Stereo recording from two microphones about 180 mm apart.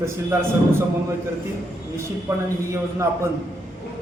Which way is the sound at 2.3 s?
15° right (ahead or behind).